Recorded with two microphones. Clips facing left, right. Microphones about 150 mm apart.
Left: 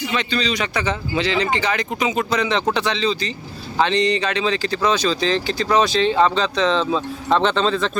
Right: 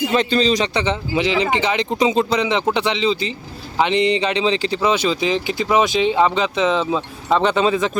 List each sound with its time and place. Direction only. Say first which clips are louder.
0.0 s speech: right 6 dB; 40° right (ahead or behind)
2.4 s speech: right 1 dB; 15° right (ahead or behind)